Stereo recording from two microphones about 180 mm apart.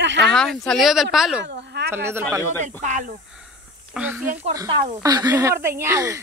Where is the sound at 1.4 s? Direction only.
65° right (ahead or behind).